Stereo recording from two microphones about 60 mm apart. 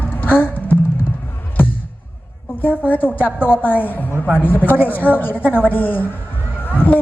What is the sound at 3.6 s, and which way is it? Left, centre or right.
A woman's voice, left.